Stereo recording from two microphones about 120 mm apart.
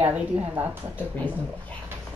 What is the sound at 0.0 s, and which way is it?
Speech, 15° right (ahead or behind).